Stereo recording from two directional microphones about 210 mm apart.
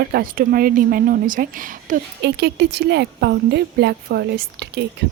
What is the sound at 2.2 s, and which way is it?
A woman's voice, 55° right (ahead or behind).